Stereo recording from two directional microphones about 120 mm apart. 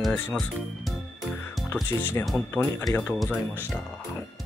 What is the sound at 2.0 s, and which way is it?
Speech, 15° left (ahead or behind).